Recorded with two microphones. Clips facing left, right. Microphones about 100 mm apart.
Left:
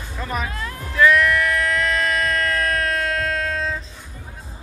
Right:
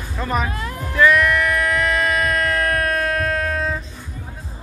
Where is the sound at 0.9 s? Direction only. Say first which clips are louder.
Right 1 dB; 5° right (ahead or behind).